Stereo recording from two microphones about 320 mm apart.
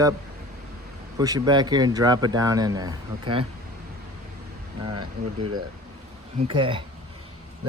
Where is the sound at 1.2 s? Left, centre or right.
Centre.